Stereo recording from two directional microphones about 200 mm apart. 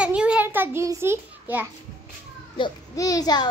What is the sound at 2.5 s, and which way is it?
Speech, 20° left (ahead or behind).